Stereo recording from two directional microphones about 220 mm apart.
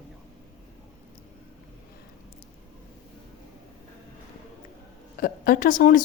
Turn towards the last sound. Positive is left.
turn(degrees=35)  # may be behind; listen again after turning